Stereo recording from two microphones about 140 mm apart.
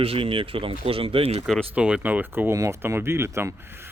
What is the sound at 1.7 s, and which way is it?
Speech, 10° right (ahead or behind).